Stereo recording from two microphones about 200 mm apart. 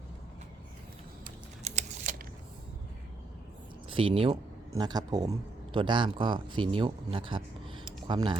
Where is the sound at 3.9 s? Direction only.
25° right (ahead or behind).